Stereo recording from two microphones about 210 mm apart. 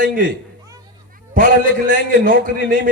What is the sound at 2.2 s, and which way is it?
Speech, 40° right (ahead or behind).